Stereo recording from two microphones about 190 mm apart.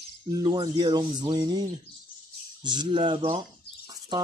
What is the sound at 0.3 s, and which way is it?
Speech, 20° right (ahead or behind).